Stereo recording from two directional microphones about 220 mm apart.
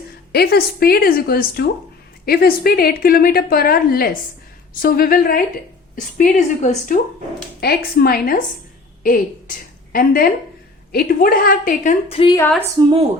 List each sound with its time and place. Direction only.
0.3 s a woman's voice: 45° left (ahead or behind); by 12.4 s 25° left (ahead or behind)
12.8 s speech: 25° right (ahead or behind)